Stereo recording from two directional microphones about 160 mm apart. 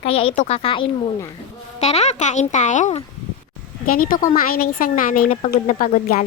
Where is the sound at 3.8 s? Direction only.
60° left (ahead or behind).